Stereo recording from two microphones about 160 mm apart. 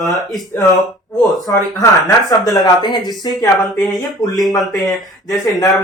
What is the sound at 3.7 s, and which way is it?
Speech, centre (ahead or behind).